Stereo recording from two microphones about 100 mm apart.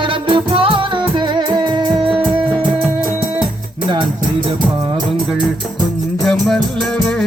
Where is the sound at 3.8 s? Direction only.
50° right (ahead or behind).